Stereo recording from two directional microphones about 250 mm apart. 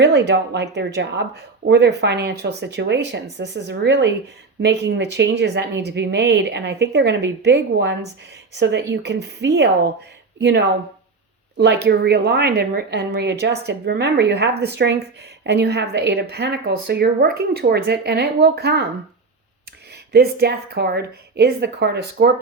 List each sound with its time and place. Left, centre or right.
0.0 s speech: right
20.1 s speech: right